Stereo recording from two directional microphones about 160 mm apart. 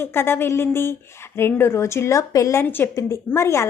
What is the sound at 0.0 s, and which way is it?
Speech, 15° left (ahead or behind).